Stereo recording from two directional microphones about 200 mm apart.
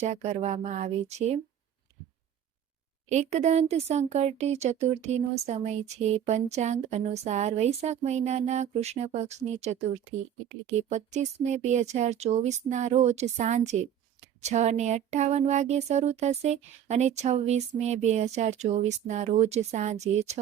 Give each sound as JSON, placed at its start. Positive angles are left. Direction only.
{"t": 0.0, "sound": "speech", "side_deg": -35}
{"t": 3.1, "sound": "speech", "side_deg": -35}
{"t": 10.8, "sound": "speech", "side_deg": -35}